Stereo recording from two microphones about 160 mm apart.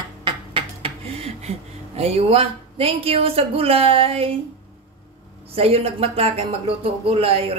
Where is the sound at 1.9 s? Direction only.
40° right (ahead or behind).